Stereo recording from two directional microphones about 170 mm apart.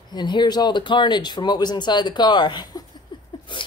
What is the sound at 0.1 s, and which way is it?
Speech, 25° left (ahead or behind).